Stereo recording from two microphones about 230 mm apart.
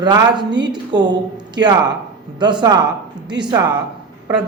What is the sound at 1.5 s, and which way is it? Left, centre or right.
A man's voice, centre.